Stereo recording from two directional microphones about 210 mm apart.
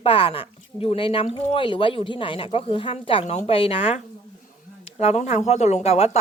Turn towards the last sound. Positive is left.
turn(degrees=30)  # may be behind; listen again after turning